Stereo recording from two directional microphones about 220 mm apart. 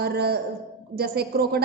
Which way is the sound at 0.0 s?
45° right (ahead or behind).